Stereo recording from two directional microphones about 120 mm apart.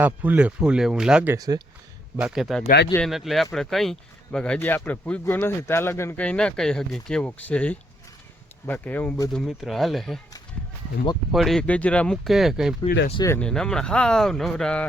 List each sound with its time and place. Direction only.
0.0 s speech: 15° right (ahead or behind)
1.4 s speech: 35° right (ahead or behind)
2.1 s speech: 5° right (ahead or behind); by 6.1 s 20° left (ahead or behind)
6.1 s speech: 10° left (ahead or behind)
9.3 s speech: centre (ahead or behind)
11.3 s speech: centre (ahead or behind)
11.6 s speech: 10° left (ahead or behind)
12.8 s speech: 55° left (ahead or behind)
13.4 s speech: 5° left (ahead or behind)